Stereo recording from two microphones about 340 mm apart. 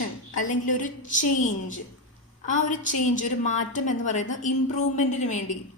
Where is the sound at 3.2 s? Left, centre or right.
Left.